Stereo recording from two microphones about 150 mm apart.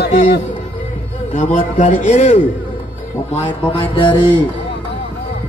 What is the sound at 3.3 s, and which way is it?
Music, 35° left (ahead or behind).